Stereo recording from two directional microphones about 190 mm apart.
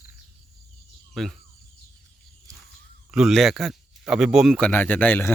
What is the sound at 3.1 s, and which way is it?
Speech, centre (ahead or behind).